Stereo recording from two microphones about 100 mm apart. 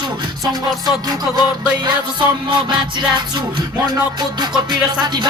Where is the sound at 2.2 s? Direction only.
55° right (ahead or behind).